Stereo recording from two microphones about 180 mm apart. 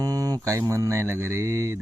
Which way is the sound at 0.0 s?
20° right (ahead or behind).